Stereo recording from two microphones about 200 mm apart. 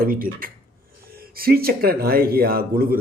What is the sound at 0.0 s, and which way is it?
Speech, 45° right (ahead or behind).